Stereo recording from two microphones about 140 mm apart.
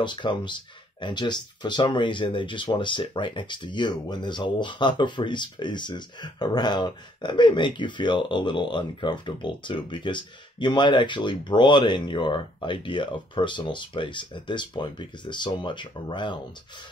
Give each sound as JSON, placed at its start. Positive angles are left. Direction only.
{"t": 0.0, "sound": "speech", "side_deg": 35}